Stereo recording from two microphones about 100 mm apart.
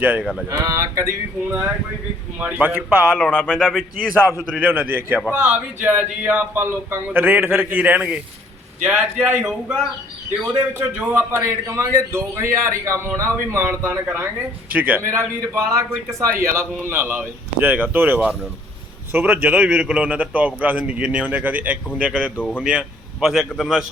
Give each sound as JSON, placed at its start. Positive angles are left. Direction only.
{"t": 0.0, "sound": "speech", "side_deg": -15}
{"t": 0.4, "sound": "a sound", "side_deg": -35}
{"t": 2.4, "sound": "speech", "side_deg": -15}
{"t": 3.2, "sound": "a man's voice", "side_deg": 10}
{"t": 4.7, "sound": "speech", "side_deg": -20}
{"t": 10.4, "sound": "a man's voice", "side_deg": -15}
{"t": 15.0, "sound": "a man's voice", "side_deg": -25}